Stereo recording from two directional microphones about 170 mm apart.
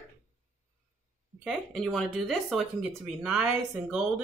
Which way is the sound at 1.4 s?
Centre (ahead or behind).